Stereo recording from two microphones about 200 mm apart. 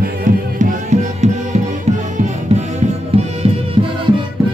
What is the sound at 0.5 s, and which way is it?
Music, 35° right (ahead or behind).